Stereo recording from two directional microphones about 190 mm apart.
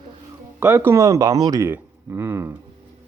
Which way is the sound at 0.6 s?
10° right (ahead or behind).